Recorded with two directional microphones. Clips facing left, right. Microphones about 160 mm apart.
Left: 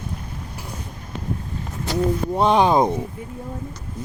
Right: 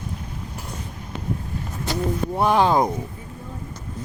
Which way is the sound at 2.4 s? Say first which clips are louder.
Left 2 dB; 20° left (ahead or behind).